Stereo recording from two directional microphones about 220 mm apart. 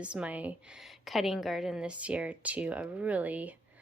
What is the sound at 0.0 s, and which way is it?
A woman's voice, 5° right (ahead or behind).